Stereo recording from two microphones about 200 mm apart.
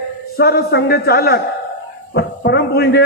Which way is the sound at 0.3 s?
50° left (ahead or behind).